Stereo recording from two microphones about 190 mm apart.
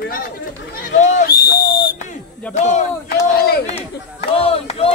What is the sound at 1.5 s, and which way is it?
Whistle, 60° left (ahead or behind).